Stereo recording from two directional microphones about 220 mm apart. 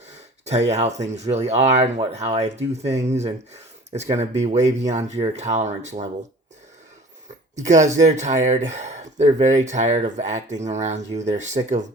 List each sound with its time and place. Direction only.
0.7 s speech: 30° right (ahead or behind)
7.5 s speech: 35° right (ahead or behind)